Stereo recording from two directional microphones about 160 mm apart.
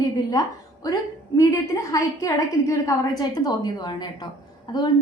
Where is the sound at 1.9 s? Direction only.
20° left (ahead or behind).